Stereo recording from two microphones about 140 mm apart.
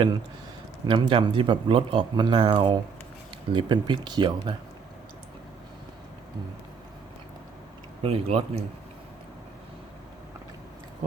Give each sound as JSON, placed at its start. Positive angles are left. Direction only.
{"t": 0.9, "sound": "speech", "side_deg": -35}
{"t": 8.0, "sound": "speech", "side_deg": -45}